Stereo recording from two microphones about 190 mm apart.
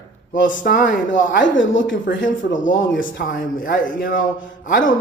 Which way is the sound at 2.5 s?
45° left (ahead or behind).